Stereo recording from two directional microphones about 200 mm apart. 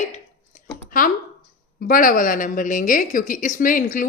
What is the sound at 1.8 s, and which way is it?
A woman's voice, 45° left (ahead or behind).